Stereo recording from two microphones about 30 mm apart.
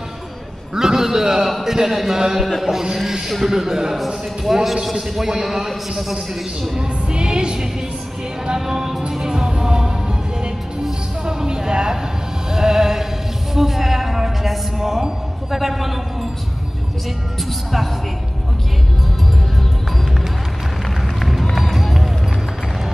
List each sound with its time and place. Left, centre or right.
0.7 s a man's voice: centre
1.6 s a sound: centre
4.5 s a man's voice: centre
5.3 s a sound: centre
5.7 s a man's voice: centre
6.8 s music: right
8.5 s a sound: centre
9.2 s music: right
10.8 s speech: right
12.4 s music: centre
13.6 s speech: centre
15.5 s a sound: centre